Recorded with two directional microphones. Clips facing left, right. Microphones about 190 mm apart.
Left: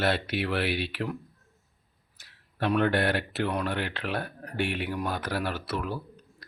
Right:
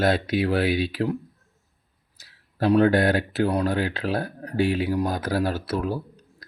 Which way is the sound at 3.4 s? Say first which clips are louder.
Right 6 dB; 40° right (ahead or behind).